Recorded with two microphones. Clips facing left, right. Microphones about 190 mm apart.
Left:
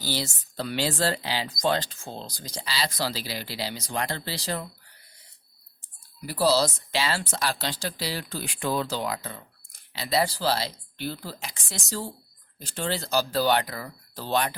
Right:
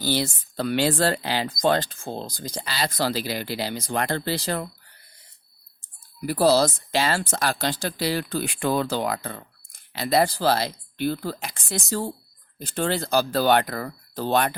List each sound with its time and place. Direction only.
0.0 s speech: 55° right (ahead or behind)
6.2 s speech: 55° right (ahead or behind)